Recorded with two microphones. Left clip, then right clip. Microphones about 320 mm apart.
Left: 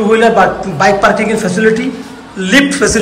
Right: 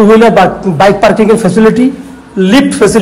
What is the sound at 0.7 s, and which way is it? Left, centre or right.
Speech, centre.